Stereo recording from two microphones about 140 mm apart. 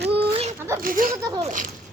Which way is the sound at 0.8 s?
85° right.